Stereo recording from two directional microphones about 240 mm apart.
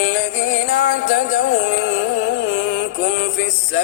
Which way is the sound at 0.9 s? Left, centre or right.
Left.